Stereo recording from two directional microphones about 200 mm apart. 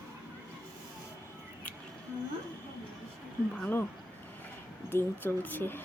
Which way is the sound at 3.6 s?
10° left (ahead or behind).